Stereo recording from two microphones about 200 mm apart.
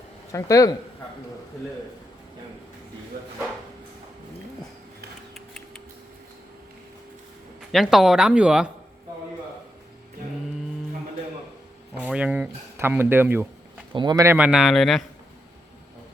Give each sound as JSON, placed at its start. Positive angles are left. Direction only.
{"t": 0.3, "sound": "speech", "side_deg": 15}
{"t": 5.3, "sound": "tick-tock", "side_deg": 0}
{"t": 7.7, "sound": "speech", "side_deg": 0}
{"t": 11.9, "sound": "speech", "side_deg": -5}
{"t": 13.9, "sound": "speech", "side_deg": -20}
{"t": 14.3, "sound": "speech", "side_deg": -5}